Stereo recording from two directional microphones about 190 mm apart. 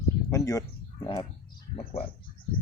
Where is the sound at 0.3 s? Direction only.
15° left (ahead or behind).